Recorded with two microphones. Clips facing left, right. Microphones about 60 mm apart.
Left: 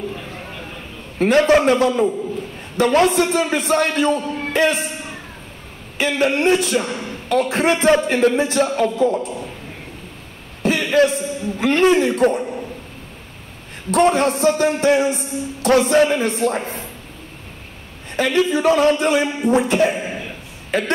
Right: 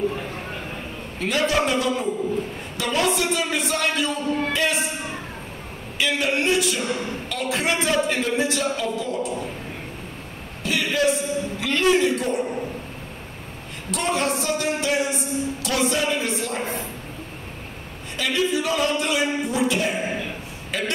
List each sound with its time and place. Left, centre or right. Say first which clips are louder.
1.2 s a man's voice: left 8 dB; left
4.5 s music: left 5 dB; left
5.9 s a man's voice: left 5 dB; left
10.6 s a sound: left 7 dB; left
11.5 s a man's voice: left 6 dB; left
13.8 s a man's voice: left 8 dB; left
18.1 s a man's voice: left 6 dB; left